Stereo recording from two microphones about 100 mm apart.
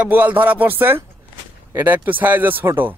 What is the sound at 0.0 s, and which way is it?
Speech, 15° right (ahead or behind).